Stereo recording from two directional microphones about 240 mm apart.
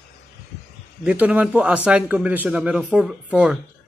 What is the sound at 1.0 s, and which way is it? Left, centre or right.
A man's voice, centre.